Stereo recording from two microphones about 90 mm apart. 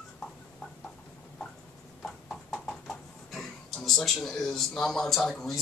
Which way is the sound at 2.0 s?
5° left (ahead or behind).